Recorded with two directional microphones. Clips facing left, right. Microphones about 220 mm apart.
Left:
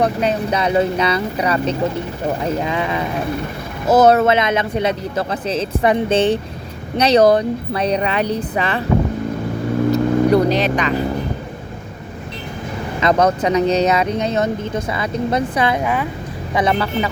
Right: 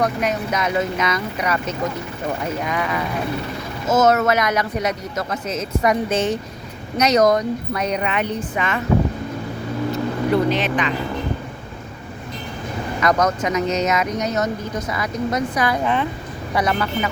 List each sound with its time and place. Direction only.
0.0 s speech: 30° left (ahead or behind)
9.9 s speech: 40° left (ahead or behind)
13.0 s speech: 30° left (ahead or behind)
15.8 s a woman's voice: 5° left (ahead or behind)
16.6 s speech: 30° left (ahead or behind)